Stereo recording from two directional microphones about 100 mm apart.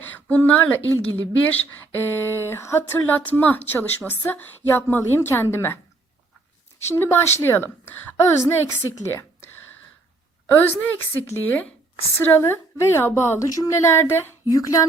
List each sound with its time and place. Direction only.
0.0 s a woman's voice: 15° left (ahead or behind)
6.8 s a woman's voice: 25° left (ahead or behind)
9.0 s a sound: 25° left (ahead or behind)
10.5 s a woman's voice: 20° left (ahead or behind)